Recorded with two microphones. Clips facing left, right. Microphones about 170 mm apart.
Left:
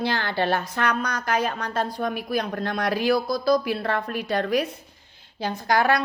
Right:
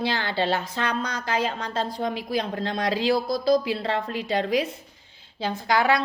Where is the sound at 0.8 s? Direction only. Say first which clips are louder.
Left 2 dB; 25° right (ahead or behind).